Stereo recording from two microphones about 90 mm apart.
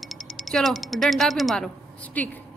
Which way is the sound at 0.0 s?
Centre (ahead or behind).